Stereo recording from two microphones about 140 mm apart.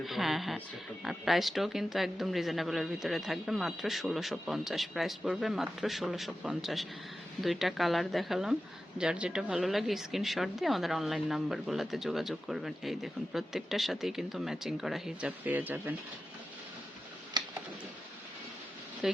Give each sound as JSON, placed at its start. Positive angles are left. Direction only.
{"t": 0.0, "sound": "speech", "side_deg": 0}
{"t": 17.4, "sound": "computer keyboard", "side_deg": -30}
{"t": 19.0, "sound": "speech", "side_deg": -5}